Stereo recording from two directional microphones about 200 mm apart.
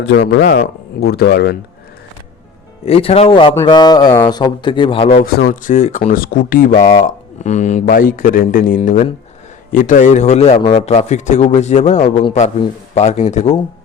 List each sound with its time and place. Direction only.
0.0 s speech: 60° left (ahead or behind)
2.8 s speech: 30° left (ahead or behind)
5.5 s a man's voice: 40° left (ahead or behind)